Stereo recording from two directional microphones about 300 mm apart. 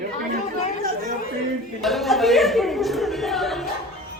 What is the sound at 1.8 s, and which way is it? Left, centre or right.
Speech, centre.